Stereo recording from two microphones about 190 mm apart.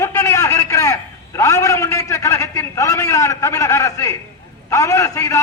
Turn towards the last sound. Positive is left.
turn(degrees=15)  # may be behind; listen again after turning